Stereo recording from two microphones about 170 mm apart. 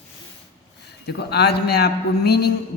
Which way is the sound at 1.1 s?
75° left (ahead or behind).